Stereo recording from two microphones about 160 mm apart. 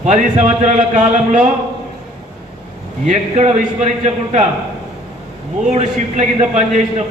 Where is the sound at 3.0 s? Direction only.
45° right (ahead or behind).